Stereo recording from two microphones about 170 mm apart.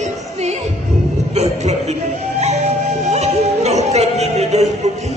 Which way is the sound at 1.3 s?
40° right (ahead or behind).